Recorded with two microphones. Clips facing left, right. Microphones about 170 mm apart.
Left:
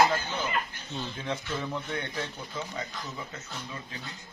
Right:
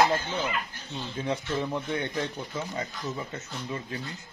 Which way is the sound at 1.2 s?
10° right (ahead or behind).